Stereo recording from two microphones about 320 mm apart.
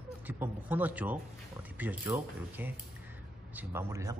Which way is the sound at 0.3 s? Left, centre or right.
Centre.